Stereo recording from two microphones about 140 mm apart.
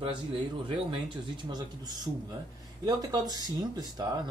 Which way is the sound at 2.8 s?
30° right (ahead or behind).